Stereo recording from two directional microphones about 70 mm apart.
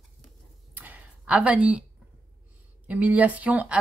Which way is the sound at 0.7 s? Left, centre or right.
Right.